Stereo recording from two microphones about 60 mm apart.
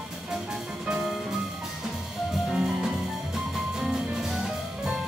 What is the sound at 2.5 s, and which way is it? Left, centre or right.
Music, centre.